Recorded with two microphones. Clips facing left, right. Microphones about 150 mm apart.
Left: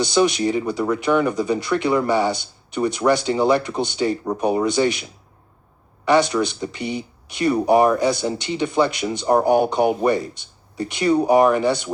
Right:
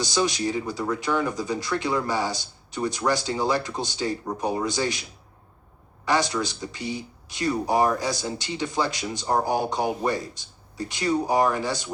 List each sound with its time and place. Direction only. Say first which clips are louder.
0.0 s speech: left 7 dB; 60° left (ahead or behind)
6.1 s speech: left 7 dB; 60° left (ahead or behind)